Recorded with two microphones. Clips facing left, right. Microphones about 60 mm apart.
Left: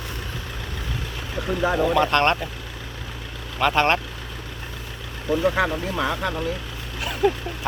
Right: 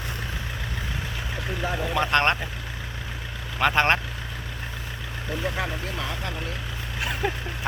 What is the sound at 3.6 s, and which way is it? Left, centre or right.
Speech, right.